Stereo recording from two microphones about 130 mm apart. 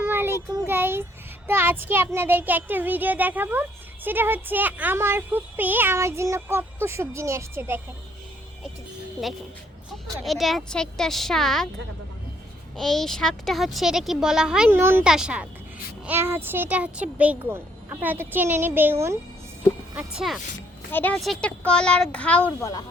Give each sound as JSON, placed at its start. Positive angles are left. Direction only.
{"t": 0.0, "sound": "child singing", "side_deg": -15}
{"t": 10.2, "sound": "a child's voice", "side_deg": 0}
{"t": 12.7, "sound": "a child's voice", "side_deg": 0}
{"t": 14.7, "sound": "child singing", "side_deg": -15}
{"t": 15.0, "sound": "child singing", "side_deg": -5}
{"t": 16.0, "sound": "child singing", "side_deg": -15}
{"t": 20.0, "sound": "a child's voice", "side_deg": -5}
{"t": 20.9, "sound": "a child's voice", "side_deg": 15}
{"t": 21.2, "sound": "a child's voice", "side_deg": 0}